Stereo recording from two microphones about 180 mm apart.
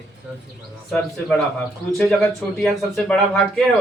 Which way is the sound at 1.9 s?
Centre (ahead or behind).